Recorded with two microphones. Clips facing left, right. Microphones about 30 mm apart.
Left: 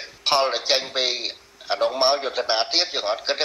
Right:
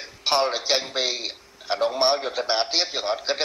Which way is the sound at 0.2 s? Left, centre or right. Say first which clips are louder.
Left 2 dB; centre.